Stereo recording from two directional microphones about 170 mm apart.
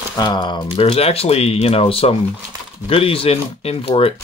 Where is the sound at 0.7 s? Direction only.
35° left (ahead or behind).